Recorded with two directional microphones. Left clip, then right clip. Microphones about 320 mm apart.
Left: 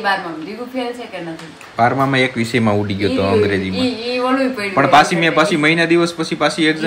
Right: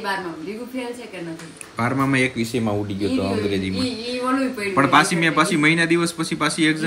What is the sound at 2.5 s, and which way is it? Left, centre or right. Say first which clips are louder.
Speech: left 7 dB; left.